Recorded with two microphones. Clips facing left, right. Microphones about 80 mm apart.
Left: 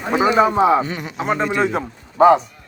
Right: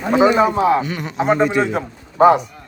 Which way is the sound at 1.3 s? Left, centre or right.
Centre.